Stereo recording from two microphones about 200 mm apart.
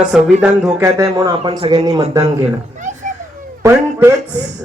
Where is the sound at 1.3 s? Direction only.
30° right (ahead or behind).